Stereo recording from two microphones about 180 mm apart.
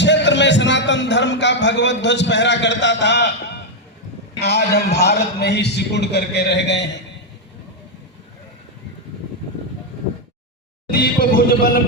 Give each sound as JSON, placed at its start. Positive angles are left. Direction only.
{"t": 0.0, "sound": "a man's voice", "side_deg": 80}
{"t": 10.9, "sound": "music", "side_deg": 55}